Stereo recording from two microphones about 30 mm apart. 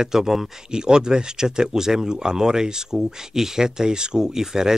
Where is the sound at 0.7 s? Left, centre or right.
Right.